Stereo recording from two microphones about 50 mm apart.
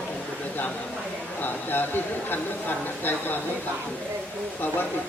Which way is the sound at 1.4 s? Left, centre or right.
Left.